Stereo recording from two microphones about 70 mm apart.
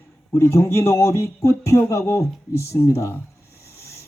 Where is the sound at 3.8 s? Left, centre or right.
Left.